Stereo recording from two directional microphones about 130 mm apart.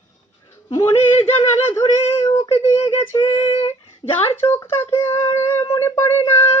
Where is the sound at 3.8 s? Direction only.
35° left (ahead or behind).